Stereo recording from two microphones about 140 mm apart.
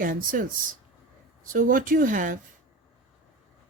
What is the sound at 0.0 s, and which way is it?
Speech, 75° right (ahead or behind).